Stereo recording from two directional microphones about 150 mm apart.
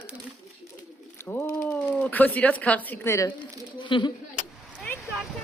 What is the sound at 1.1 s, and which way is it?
Speech, 15° left (ahead or behind).